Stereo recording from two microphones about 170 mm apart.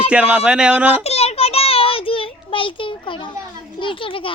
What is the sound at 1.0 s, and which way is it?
A child's voice, 35° left (ahead or behind).